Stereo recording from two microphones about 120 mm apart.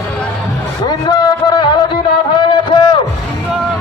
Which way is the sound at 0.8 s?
35° left (ahead or behind).